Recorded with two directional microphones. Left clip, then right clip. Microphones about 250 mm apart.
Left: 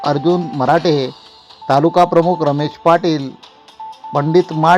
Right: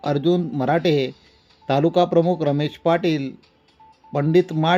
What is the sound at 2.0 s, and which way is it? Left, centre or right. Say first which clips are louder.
Speech: left 5 dB; centre.